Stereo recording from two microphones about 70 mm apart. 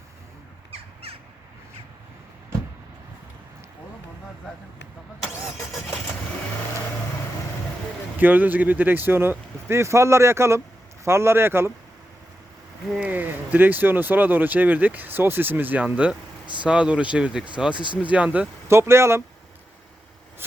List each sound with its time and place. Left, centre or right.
8.2 s speech: right
13.0 s speech: right
18.7 s speech: right